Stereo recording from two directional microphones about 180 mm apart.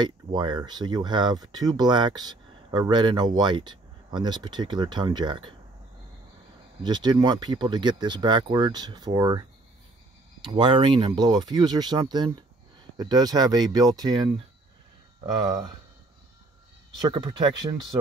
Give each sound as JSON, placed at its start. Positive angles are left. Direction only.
{"t": 0.0, "sound": "speech", "side_deg": -25}
{"t": 6.8, "sound": "speech", "side_deg": -25}
{"t": 17.1, "sound": "speech", "side_deg": -25}